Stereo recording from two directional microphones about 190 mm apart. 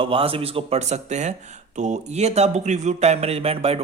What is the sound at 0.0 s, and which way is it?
A man's voice, 30° right (ahead or behind).